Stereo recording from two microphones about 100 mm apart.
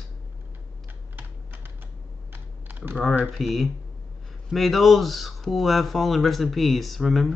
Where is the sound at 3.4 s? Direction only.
Centre (ahead or behind).